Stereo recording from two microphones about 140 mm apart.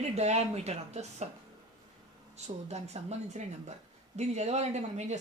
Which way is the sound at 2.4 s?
50° right (ahead or behind).